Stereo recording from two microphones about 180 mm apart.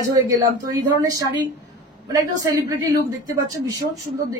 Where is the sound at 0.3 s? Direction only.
20° right (ahead or behind).